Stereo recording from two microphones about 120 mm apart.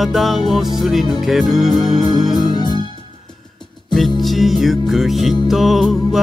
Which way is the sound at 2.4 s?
40° left (ahead or behind).